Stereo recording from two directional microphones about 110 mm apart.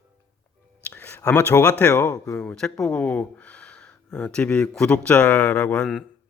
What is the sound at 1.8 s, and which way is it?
Speech, 25° left (ahead or behind).